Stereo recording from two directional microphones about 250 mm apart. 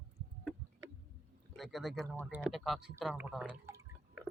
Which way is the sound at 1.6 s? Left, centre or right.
Centre.